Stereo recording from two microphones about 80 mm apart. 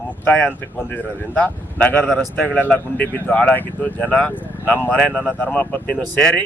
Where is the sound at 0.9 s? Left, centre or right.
Centre.